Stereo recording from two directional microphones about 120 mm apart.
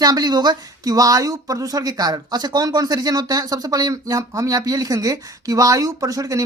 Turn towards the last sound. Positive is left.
turn(degrees=-30)  # may be behind; listen again after turning